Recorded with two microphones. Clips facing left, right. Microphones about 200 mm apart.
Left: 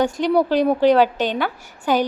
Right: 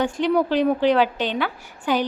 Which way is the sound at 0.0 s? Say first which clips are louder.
Left 2 dB; 40° left (ahead or behind).